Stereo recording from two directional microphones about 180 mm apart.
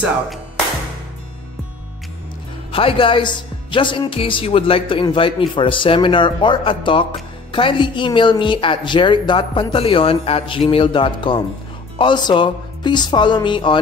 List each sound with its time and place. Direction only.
2.7 s speech: 30° left (ahead or behind)